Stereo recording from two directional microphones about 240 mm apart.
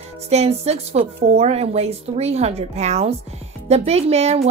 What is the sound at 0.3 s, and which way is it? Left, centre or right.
A woman's voice, right.